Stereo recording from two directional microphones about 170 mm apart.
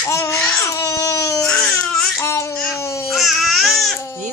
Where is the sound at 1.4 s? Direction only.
5° left (ahead or behind).